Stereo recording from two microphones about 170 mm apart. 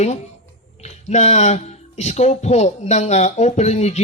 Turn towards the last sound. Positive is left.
turn(degrees=40)  # may be behind; listen again after turning